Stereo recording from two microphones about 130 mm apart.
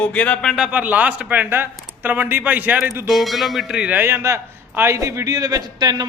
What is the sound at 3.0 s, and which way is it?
A man's voice, centre (ahead or behind).